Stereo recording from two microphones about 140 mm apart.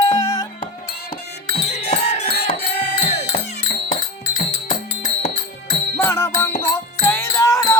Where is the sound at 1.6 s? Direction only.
50° left (ahead or behind).